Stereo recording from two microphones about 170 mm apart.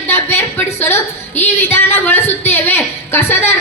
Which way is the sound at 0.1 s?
10° left (ahead or behind).